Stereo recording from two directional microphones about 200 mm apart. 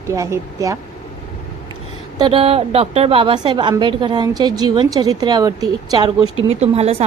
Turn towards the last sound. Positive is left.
turn(degrees=-30)  # may be behind; listen again after turning